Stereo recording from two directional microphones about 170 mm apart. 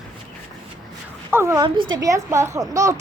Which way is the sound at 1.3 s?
15° right (ahead or behind).